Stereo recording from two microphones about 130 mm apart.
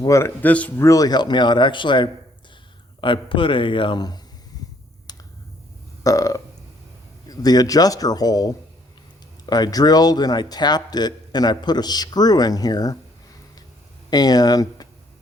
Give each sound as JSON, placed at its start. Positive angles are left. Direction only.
{"t": 0.0, "sound": "speech", "side_deg": 20}
{"t": 0.9, "sound": "speech", "side_deg": 30}
{"t": 5.1, "sound": "finger snapping", "side_deg": 30}
{"t": 6.0, "sound": "burping", "side_deg": 25}
{"t": 7.3, "sound": "speech", "side_deg": 30}
{"t": 14.1, "sound": "speech", "side_deg": 30}